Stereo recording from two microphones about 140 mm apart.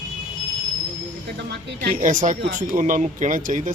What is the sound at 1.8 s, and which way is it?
Speech, 70° right (ahead or behind).